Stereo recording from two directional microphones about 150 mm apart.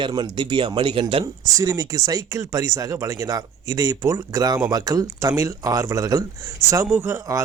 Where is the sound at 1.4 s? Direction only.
20° right (ahead or behind).